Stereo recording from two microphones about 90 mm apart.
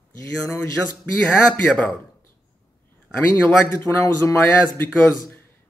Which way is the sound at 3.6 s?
25° left (ahead or behind).